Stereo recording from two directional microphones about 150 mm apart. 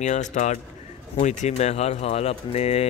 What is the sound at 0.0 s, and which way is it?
Speech, 55° left (ahead or behind).